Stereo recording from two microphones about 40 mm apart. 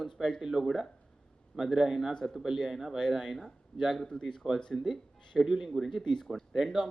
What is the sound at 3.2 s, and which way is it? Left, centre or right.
A man's voice, centre.